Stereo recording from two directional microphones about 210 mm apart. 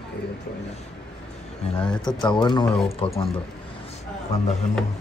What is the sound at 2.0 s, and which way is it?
A man's voice, 20° left (ahead or behind).